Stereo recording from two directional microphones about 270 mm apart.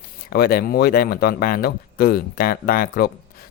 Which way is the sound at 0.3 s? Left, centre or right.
Left.